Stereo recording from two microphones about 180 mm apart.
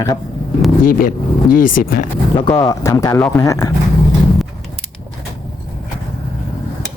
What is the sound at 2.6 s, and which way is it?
Speech, 15° left (ahead or behind).